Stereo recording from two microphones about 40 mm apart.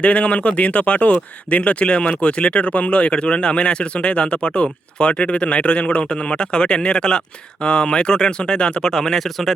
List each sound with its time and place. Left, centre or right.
0.0 s speech: left
8.8 s speech: centre